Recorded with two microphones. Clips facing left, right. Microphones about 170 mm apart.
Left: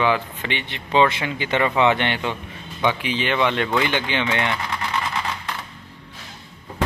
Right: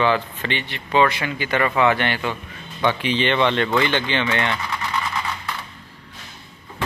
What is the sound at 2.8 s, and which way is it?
Speech, 10° left (ahead or behind).